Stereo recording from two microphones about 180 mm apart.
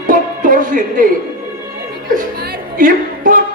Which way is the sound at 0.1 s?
45° right (ahead or behind).